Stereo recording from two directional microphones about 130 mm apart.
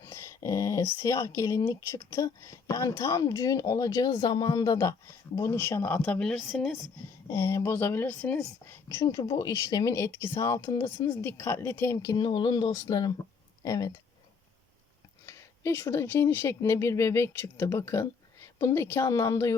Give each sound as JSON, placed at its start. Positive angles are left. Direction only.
{"t": 0.0, "sound": "speech", "side_deg": 25}
{"t": 7.3, "sound": "speech", "side_deg": 20}
{"t": 10.8, "sound": "speech", "side_deg": 40}
{"t": 11.2, "sound": "speech", "side_deg": 20}
{"t": 15.3, "sound": "speech", "side_deg": 20}